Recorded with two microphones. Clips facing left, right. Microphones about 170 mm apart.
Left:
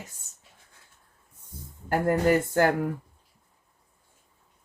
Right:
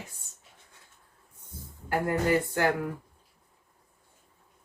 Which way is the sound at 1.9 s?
45° left (ahead or behind).